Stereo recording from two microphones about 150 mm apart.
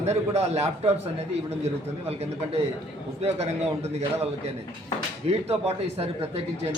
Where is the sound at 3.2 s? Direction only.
45° right (ahead or behind).